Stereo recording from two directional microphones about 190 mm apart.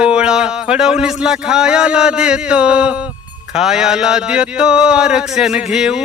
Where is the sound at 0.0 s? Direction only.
5° right (ahead or behind).